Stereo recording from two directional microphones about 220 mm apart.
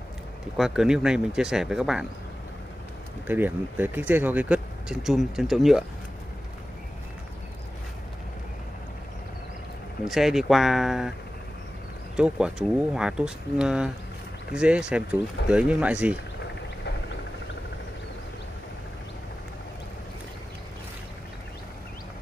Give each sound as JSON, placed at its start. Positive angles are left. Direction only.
{"t": 0.6, "sound": "speech", "side_deg": -5}
{"t": 3.3, "sound": "speech", "side_deg": -10}
{"t": 10.0, "sound": "speech", "side_deg": 0}
{"t": 12.2, "sound": "speech", "side_deg": -5}